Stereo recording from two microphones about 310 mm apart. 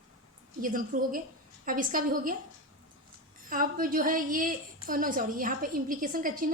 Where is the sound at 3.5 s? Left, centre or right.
Right.